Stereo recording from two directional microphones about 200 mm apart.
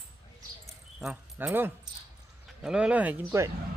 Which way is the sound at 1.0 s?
5° right (ahead or behind).